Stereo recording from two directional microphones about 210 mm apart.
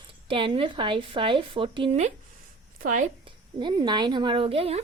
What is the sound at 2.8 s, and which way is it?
Speech, 40° right (ahead or behind).